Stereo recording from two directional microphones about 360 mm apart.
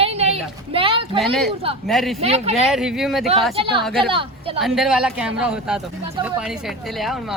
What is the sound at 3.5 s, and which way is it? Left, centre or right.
Speech, centre.